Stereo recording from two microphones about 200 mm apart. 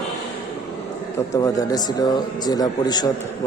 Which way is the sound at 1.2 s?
15° left (ahead or behind).